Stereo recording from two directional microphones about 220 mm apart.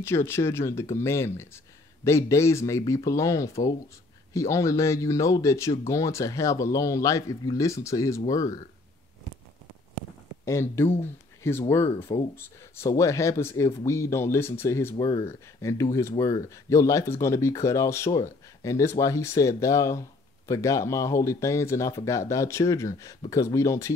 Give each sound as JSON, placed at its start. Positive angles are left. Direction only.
{"t": 0.0, "sound": "speech", "side_deg": 10}
{"t": 10.4, "sound": "speech", "side_deg": 10}